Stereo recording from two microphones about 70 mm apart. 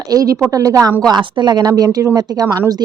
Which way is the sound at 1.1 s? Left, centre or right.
Right.